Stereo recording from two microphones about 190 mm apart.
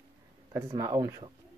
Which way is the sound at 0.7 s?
15° right (ahead or behind).